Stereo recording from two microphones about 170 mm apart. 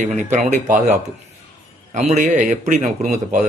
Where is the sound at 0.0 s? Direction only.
45° right (ahead or behind).